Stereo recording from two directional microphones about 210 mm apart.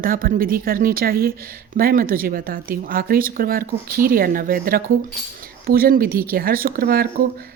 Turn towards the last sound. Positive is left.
turn(degrees=-45)  # may be behind; listen again after turning